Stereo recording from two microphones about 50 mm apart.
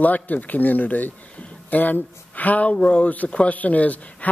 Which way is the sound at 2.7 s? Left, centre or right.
Left.